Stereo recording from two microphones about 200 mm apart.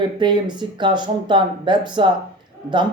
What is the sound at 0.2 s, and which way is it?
Speech, 20° right (ahead or behind).